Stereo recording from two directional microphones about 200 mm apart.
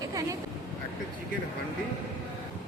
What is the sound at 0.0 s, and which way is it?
Vehicle, 15° right (ahead or behind).